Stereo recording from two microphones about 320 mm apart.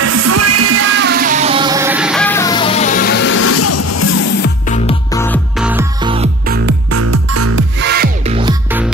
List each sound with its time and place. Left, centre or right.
0.0 s music: right; by 4.2 s left
4.4 s music: left
5.1 s music: centre
6.9 s music: right
7.8 s music: right
8.3 s music: centre